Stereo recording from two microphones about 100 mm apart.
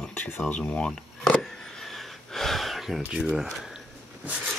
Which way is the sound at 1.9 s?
5° left (ahead or behind).